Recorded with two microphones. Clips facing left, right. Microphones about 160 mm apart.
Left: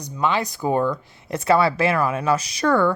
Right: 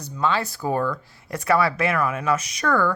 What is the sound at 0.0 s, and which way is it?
Speech, 15° left (ahead or behind).